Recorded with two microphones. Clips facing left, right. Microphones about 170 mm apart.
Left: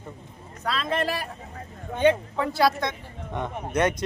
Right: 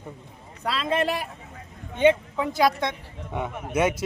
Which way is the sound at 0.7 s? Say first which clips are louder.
Right 2 dB; 25° right (ahead or behind).